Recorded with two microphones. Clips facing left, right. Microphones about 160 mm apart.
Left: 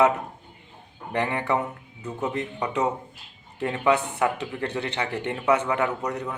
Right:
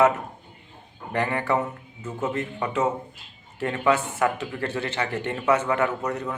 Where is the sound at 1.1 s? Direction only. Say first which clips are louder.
Right 1 dB; 15° left (ahead or behind).